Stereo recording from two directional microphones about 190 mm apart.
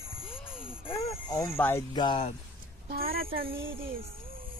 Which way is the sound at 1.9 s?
25° left (ahead or behind).